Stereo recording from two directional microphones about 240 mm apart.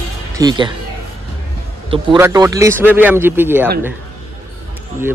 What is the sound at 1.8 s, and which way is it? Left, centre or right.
A man's voice, right.